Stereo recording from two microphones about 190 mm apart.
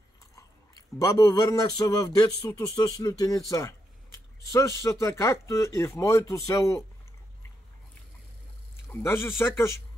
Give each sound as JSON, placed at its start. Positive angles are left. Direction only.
{"t": 0.9, "sound": "speech", "side_deg": 20}
{"t": 8.9, "sound": "speech", "side_deg": 10}